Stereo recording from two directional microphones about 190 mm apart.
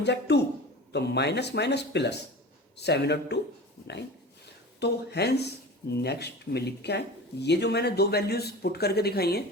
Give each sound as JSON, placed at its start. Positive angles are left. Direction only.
{"t": 0.0, "sound": "speech", "side_deg": 65}
{"t": 4.8, "sound": "speech", "side_deg": 60}